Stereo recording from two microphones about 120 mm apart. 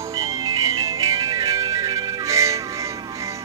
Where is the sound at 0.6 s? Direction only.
30° right (ahead or behind).